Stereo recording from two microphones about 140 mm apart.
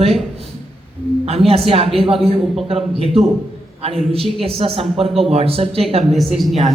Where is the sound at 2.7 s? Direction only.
45° right (ahead or behind).